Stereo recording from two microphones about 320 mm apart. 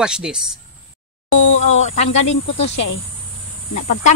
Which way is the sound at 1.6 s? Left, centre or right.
Left.